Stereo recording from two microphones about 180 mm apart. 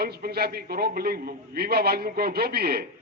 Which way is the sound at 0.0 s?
60° right (ahead or behind).